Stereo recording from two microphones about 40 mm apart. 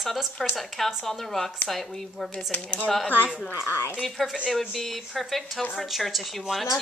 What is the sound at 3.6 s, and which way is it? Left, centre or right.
Speech, left.